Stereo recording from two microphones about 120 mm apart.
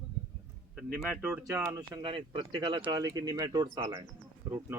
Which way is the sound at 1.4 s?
20° right (ahead or behind).